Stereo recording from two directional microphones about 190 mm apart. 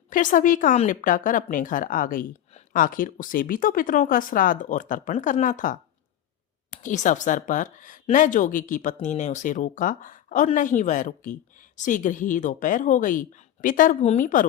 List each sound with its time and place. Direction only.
0.1 s speech: 45° left (ahead or behind)